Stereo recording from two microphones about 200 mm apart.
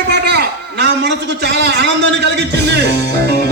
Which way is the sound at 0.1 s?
55° right (ahead or behind).